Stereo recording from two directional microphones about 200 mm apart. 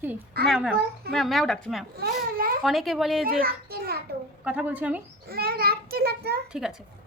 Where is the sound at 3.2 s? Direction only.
45° right (ahead or behind).